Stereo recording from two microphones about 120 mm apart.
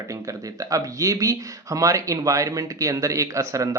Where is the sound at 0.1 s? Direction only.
30° right (ahead or behind).